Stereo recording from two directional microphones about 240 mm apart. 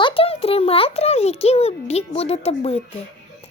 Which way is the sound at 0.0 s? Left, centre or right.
Left.